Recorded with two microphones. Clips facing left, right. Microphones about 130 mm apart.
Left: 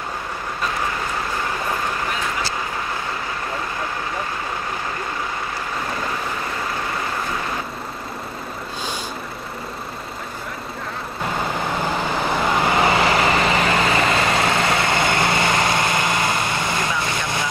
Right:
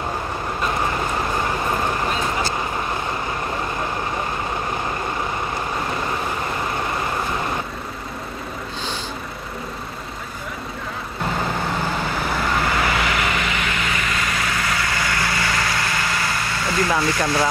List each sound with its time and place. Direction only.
2.0 s vehicle: 30° right (ahead or behind)
12.7 s vehicle: 25° left (ahead or behind)